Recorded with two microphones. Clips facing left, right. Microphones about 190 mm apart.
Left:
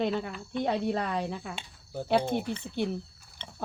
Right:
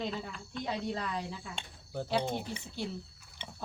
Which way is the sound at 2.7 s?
60° left (ahead or behind).